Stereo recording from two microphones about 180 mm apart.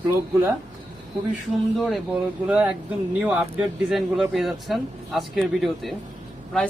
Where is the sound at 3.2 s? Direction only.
5° right (ahead or behind).